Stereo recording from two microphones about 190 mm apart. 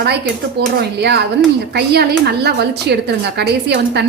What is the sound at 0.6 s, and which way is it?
A woman's voice, 60° right (ahead or behind).